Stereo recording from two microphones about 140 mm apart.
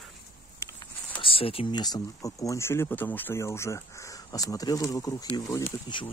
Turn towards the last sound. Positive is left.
turn(degrees=35)  # may be behind; listen again after turning